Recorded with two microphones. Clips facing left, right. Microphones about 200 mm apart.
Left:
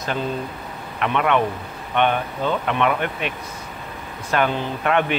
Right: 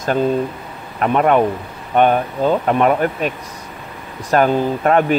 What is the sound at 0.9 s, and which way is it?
Speech, 40° right (ahead or behind).